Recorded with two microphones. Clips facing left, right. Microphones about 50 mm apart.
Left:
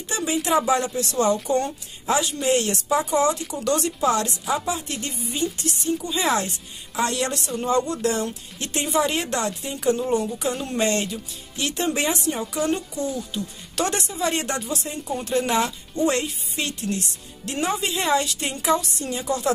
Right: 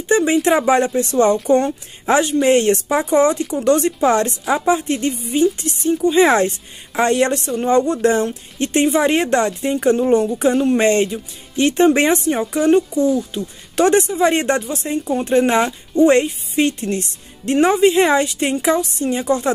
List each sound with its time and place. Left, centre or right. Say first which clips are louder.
0.1 s a woman's voice: right 8 dB; right